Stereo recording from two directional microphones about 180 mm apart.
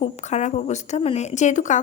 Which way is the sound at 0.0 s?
40° left (ahead or behind).